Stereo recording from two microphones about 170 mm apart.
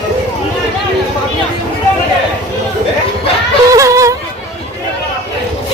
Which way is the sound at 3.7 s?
20° right (ahead or behind).